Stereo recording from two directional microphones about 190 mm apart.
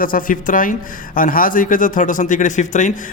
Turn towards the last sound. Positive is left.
turn(degrees=40)  # may be behind; listen again after turning